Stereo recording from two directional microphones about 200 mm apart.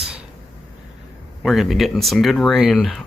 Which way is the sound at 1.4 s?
Centre (ahead or behind).